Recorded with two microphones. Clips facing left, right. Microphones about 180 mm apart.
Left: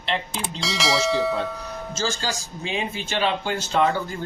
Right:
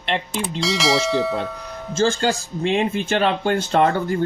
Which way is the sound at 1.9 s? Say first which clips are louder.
Right 9 dB; 60° right (ahead or behind).